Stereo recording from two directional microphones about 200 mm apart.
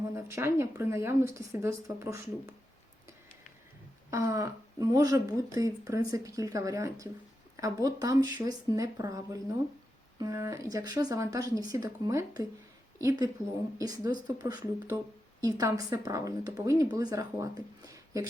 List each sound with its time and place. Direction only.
0.1 s speech: 15° right (ahead or behind)
4.1 s speech: 15° right (ahead or behind)